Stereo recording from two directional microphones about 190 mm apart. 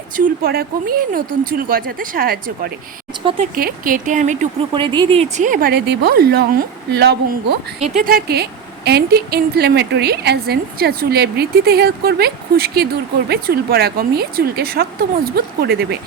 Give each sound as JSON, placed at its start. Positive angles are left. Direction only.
{"t": 0.2, "sound": "a woman's voice", "side_deg": -50}
{"t": 4.7, "sound": "a woman's voice", "side_deg": -25}